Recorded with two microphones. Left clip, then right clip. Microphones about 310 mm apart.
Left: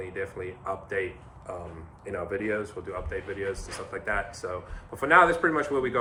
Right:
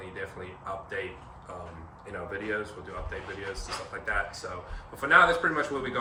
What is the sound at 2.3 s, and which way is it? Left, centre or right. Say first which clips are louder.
Speech: left 2 dB; left.